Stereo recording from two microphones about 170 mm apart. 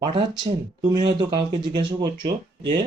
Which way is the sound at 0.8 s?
25° right (ahead or behind).